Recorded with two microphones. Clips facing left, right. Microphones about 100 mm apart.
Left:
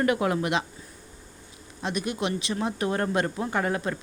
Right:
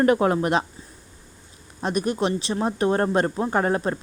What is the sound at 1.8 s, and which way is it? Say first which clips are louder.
Speech: right 5 dB; 40° right (ahead or behind).